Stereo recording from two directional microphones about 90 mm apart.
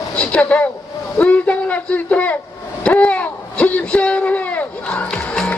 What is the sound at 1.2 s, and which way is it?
A man's voice, 15° left (ahead or behind).